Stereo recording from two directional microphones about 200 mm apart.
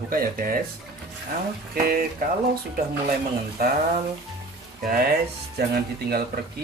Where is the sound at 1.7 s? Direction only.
50° right (ahead or behind).